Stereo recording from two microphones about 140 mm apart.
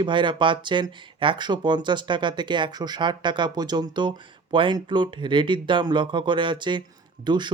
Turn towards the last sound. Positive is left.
turn(degrees=-35)  # may be behind; listen again after turning